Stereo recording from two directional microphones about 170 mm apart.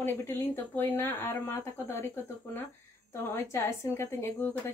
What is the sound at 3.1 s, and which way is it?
Speech, 15° left (ahead or behind).